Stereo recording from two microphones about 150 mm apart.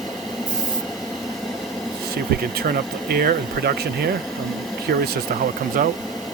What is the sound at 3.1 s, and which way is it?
Speech, 80° right.